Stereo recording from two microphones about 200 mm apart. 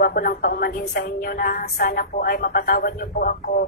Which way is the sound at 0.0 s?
50° left (ahead or behind).